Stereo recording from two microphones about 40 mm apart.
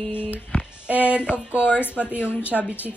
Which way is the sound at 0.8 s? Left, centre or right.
Right.